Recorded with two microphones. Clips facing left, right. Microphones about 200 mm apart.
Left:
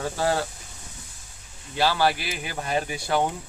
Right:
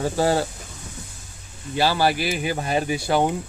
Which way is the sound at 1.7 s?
5° right (ahead or behind).